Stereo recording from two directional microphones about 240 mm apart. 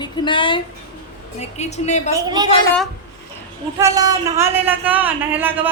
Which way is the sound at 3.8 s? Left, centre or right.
Centre.